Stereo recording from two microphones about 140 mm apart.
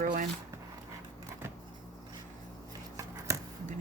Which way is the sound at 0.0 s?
70° right (ahead or behind).